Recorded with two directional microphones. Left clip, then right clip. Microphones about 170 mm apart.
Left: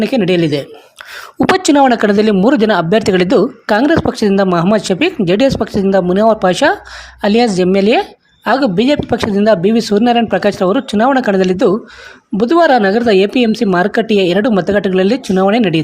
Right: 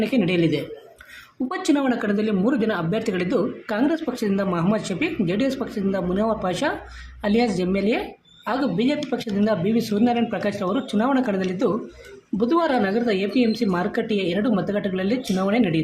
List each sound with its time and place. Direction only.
0.0 s speech: 55° left (ahead or behind)